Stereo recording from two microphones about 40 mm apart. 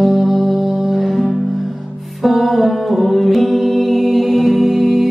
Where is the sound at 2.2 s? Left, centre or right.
Centre.